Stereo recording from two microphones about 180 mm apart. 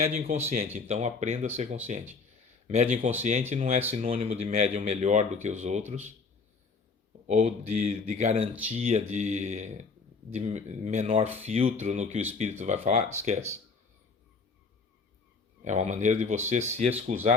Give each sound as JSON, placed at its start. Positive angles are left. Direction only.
{"t": 0.0, "sound": "speech", "side_deg": -40}
{"t": 2.6, "sound": "speech", "side_deg": -40}
{"t": 7.3, "sound": "speech", "side_deg": -40}
{"t": 15.6, "sound": "speech", "side_deg": -40}